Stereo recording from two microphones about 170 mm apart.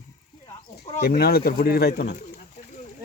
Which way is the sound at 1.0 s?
65° left (ahead or behind).